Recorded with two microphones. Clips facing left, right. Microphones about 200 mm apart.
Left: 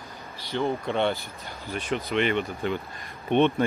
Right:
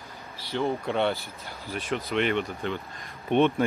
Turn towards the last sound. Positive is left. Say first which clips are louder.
# left 1 dB
turn(degrees=-5)  # may be behind; listen again after turning